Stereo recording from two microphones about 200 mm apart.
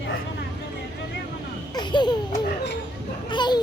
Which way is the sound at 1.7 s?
20° left (ahead or behind).